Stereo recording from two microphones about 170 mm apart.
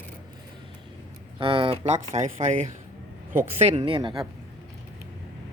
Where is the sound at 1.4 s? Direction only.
30° right (ahead or behind).